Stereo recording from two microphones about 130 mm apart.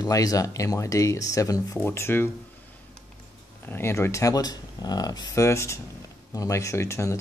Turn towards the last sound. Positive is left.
turn(degrees=20)  # may be behind; listen again after turning